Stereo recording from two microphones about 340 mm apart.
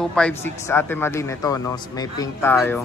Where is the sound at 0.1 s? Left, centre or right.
Centre.